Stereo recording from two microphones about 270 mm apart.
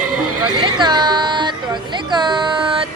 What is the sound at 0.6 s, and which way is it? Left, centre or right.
Music, centre.